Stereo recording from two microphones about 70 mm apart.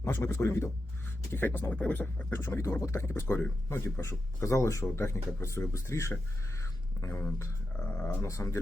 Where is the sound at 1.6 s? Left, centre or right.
Centre.